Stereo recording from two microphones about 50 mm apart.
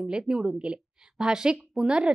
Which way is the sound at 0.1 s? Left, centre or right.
Centre.